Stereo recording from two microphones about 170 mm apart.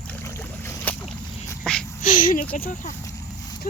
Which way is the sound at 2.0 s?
55° left (ahead or behind).